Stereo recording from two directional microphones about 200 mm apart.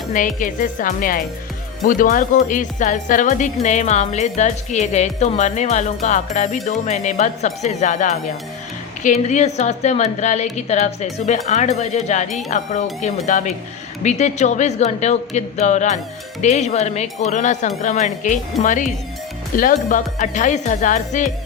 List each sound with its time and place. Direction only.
0.1 s speech: 40° left (ahead or behind)